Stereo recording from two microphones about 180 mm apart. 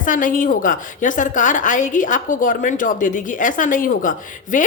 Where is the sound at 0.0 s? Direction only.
45° left (ahead or behind).